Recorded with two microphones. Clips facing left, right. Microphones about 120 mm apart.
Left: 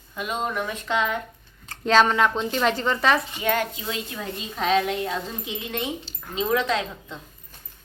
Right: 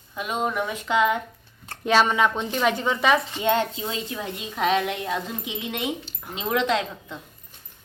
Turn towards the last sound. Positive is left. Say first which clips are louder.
# right 1 dB
turn(degrees=-15)  # may be behind; listen again after turning